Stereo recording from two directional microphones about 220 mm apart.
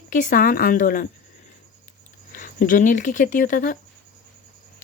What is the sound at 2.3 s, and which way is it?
A woman's voice, 35° left (ahead or behind).